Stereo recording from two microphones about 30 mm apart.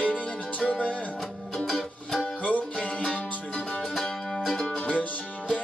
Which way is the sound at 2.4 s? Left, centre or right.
Left.